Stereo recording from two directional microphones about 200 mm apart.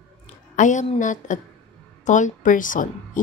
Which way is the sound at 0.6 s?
40° left (ahead or behind).